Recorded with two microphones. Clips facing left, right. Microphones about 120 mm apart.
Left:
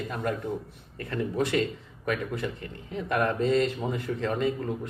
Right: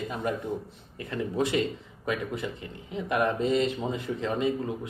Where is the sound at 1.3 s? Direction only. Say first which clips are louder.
Even; 15° right (ahead or behind).